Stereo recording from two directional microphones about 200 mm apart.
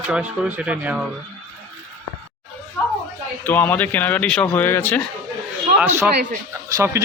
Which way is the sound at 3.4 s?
10° left (ahead or behind).